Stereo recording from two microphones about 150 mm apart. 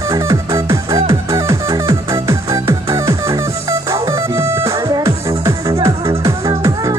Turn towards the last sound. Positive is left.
turn(degrees=-20)  # may be behind; listen again after turning